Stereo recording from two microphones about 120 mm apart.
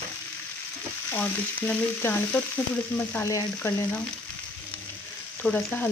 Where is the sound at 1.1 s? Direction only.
15° left (ahead or behind).